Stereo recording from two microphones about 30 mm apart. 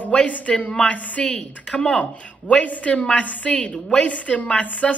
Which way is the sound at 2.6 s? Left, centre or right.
Left.